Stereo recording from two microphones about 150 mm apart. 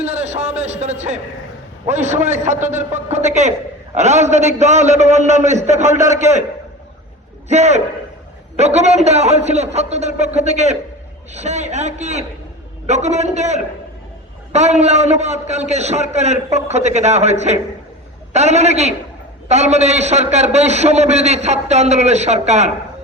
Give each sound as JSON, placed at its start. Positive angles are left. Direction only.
{"t": 0.0, "sound": "a man's voice", "side_deg": -45}
{"t": 7.4, "sound": "a man's voice", "side_deg": -50}